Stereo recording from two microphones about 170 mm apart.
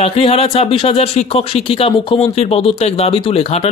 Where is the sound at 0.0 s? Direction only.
35° left (ahead or behind).